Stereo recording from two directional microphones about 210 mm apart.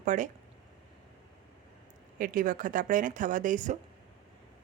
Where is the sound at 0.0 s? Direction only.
35° right (ahead or behind).